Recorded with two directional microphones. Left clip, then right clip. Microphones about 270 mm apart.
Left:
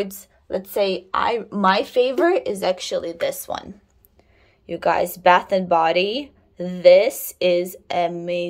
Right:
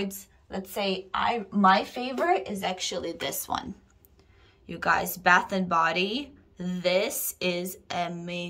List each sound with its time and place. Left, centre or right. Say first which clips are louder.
0.0 s a woman's voice: left 7 dB; centre
4.6 s a woman's voice: left 6 dB; centre